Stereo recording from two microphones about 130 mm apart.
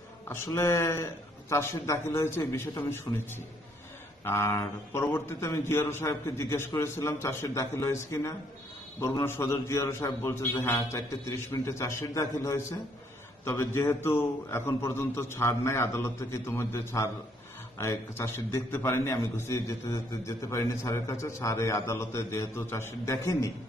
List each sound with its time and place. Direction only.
0.3 s a man's voice: 20° left (ahead or behind)
4.2 s a man's voice: 20° left (ahead or behind)